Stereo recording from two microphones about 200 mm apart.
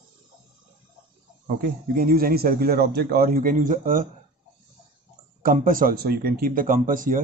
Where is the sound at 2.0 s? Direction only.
45° right (ahead or behind).